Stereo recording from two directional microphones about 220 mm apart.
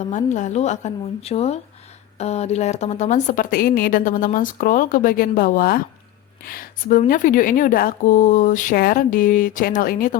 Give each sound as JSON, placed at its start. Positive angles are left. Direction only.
{"t": 0.1, "sound": "a woman's voice", "side_deg": 35}